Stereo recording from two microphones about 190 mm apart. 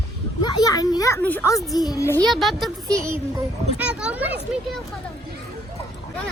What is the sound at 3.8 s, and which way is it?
Children playing, 5° right (ahead or behind).